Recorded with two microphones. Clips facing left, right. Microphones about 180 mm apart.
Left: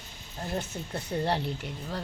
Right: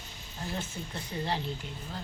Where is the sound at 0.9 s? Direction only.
65° left (ahead or behind).